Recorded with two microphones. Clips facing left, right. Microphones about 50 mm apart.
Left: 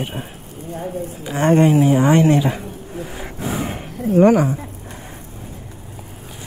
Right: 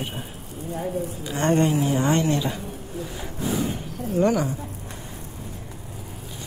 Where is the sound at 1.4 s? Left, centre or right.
Left.